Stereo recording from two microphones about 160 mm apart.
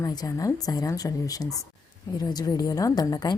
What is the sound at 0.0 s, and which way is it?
A woman's voice, 25° left (ahead or behind).